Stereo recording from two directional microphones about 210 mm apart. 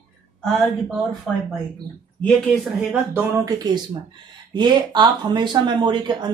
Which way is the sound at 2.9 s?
10° right (ahead or behind).